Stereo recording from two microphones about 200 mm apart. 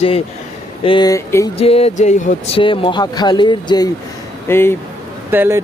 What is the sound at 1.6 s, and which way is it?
Music, 30° left (ahead or behind).